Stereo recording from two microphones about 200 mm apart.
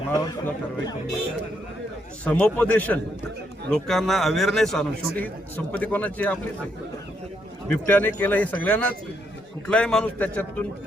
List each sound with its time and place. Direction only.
0.1 s speech: 15° left (ahead or behind)
2.2 s a man's voice: 5° left (ahead or behind)
7.7 s a man's voice: 10° left (ahead or behind)